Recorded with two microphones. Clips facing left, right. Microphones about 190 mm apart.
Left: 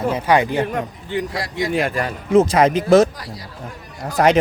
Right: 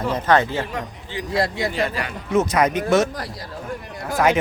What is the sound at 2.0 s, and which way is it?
Speech, 30° left (ahead or behind).